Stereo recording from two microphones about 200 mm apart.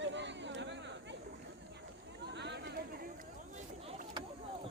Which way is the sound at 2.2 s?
60° right (ahead or behind).